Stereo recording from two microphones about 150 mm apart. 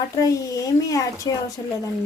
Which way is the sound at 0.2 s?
25° left (ahead or behind).